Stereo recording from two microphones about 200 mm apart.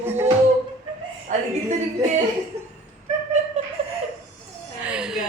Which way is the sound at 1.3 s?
40° right (ahead or behind).